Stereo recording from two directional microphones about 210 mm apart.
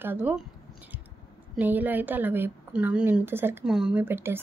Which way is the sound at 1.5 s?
10° right (ahead or behind).